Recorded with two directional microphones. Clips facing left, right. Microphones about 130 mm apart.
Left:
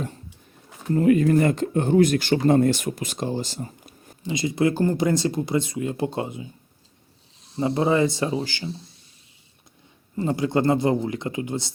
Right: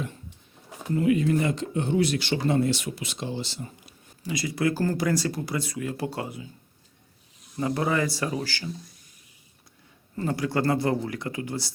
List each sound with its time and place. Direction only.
0.9 s speech: 45° left (ahead or behind)
4.2 s speech: 25° left (ahead or behind)
10.2 s speech: 20° left (ahead or behind)